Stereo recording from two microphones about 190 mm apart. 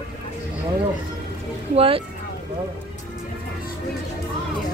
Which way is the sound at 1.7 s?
30° right (ahead or behind).